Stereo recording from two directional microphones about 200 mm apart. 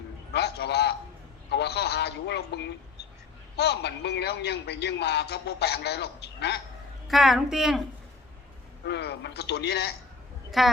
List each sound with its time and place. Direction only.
0.3 s a sound: 55° left (ahead or behind)
3.6 s a man's voice: 55° left (ahead or behind)
7.1 s a woman's voice: centre (ahead or behind)
8.9 s a man's voice: 55° left (ahead or behind)
10.6 s a woman's voice: centre (ahead or behind)